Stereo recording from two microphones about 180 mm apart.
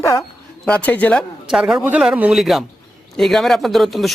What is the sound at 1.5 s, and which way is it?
A man's voice, 5° right (ahead or behind).